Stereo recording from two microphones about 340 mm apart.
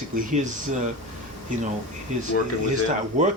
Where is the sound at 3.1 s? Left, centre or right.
Right.